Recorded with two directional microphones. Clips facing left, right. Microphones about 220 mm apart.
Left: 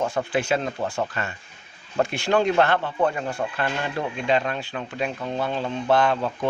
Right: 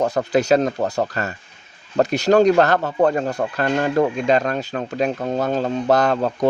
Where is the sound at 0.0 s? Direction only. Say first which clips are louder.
Right 6 dB; 40° right (ahead or behind).